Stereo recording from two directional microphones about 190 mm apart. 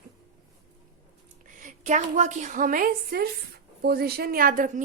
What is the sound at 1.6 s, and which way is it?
A woman's voice, 40° right (ahead or behind).